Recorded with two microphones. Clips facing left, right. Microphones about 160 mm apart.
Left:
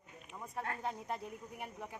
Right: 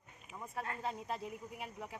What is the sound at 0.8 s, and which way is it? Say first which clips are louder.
Speech: even; centre (ahead or behind).